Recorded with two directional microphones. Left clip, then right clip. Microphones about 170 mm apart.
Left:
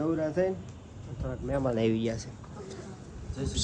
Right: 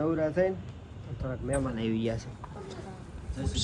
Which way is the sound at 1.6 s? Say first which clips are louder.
Left 6 dB; 45° left (ahead or behind).